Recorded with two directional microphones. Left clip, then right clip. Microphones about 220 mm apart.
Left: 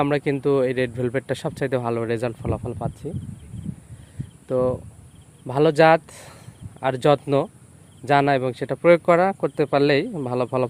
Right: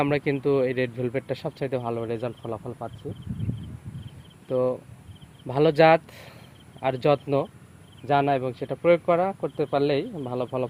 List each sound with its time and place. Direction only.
0.0 s speech: 15° left (ahead or behind); by 3.1 s 40° left (ahead or behind)
4.4 s speech: 15° left (ahead or behind); by 10.7 s 35° left (ahead or behind)